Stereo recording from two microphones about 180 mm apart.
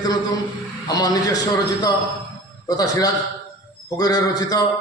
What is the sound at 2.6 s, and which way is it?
A man's voice, 20° left (ahead or behind).